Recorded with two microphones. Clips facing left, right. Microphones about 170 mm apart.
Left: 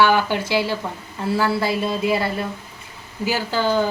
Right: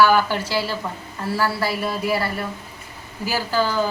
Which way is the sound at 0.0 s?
20° left (ahead or behind).